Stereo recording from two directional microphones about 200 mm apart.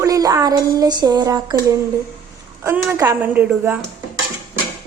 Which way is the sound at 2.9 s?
15° right (ahead or behind).